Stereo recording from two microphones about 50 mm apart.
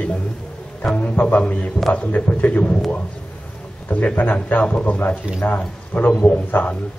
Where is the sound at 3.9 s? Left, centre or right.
Left.